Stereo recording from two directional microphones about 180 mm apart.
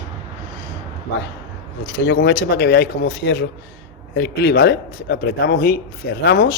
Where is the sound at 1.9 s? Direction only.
65° left (ahead or behind).